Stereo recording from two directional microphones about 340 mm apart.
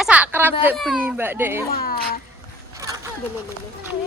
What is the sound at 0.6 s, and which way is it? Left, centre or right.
A child's voice, centre.